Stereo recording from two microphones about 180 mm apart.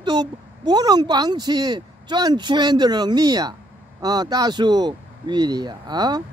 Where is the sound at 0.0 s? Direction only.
25° right (ahead or behind).